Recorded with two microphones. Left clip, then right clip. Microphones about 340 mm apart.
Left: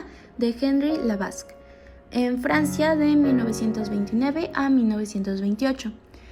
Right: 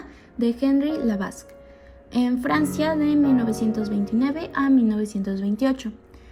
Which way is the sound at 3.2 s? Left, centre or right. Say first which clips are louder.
Right 1 dB; centre.